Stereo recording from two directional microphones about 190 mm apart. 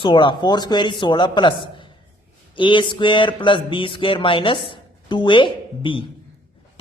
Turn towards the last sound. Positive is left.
turn(degrees=25)  # may be behind; listen again after turning